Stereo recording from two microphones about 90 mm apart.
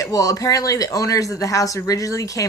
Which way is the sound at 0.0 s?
40° left (ahead or behind).